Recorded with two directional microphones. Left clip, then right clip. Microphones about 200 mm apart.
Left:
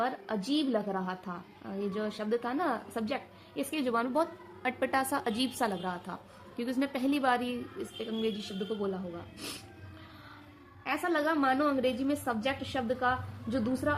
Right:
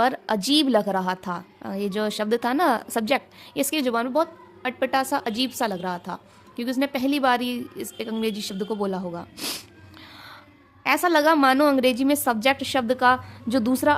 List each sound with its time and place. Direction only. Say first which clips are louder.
0.0 s a woman's voice: right 11 dB; 45° right (ahead or behind)
10.8 s a woman's voice: right 11 dB; 50° right (ahead or behind)